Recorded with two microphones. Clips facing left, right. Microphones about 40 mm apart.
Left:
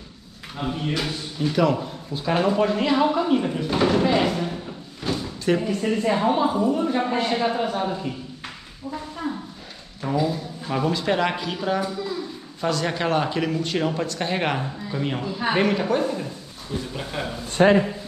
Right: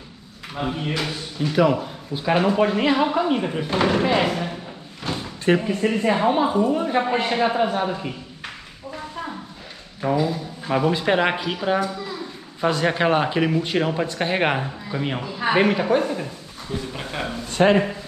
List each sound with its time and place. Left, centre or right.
0.6 s a man's voice: centre
5.1 s drawer open or close: right
5.6 s speech: right
10.1 s a man's voice: centre